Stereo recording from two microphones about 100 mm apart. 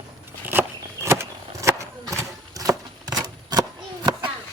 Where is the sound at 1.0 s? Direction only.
25° right (ahead or behind); by 3.7 s 45° right (ahead or behind).